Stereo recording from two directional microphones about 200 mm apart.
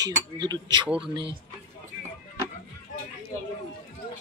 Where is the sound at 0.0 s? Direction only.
20° right (ahead or behind).